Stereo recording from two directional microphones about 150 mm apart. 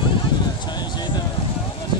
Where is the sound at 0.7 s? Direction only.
30° left (ahead or behind).